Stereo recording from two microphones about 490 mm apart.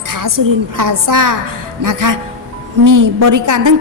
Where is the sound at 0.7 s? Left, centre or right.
Right.